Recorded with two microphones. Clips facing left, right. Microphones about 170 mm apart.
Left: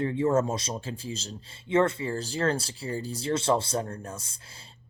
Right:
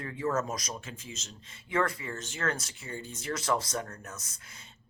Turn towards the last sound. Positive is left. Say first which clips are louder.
# left 7 dB
turn(degrees=30)  # may be behind; listen again after turning